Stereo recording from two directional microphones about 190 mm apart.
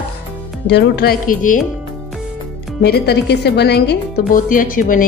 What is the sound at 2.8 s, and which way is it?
A woman's voice, 55° left (ahead or behind).